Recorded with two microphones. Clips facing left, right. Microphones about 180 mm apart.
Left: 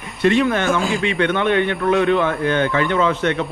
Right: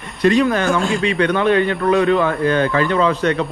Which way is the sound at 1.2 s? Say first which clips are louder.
Right 2 dB; 35° right (ahead or behind).